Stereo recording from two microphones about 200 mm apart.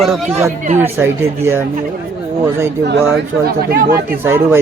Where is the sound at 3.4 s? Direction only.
50° right (ahead or behind).